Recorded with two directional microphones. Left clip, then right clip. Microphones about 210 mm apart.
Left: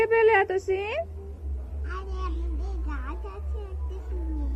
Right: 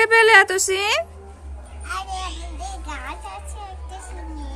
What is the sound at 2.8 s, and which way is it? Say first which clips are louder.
Music: right 5 dB; 15° right (ahead or behind).